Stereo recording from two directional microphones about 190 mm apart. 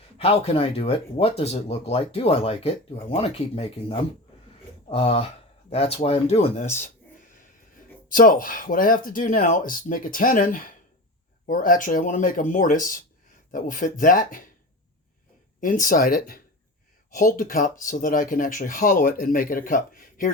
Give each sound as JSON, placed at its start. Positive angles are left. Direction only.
{"t": 0.2, "sound": "speech", "side_deg": 30}
{"t": 15.6, "sound": "speech", "side_deg": 45}